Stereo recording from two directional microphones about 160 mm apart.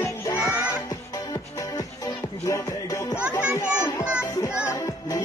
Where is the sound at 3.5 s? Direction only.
15° left (ahead or behind).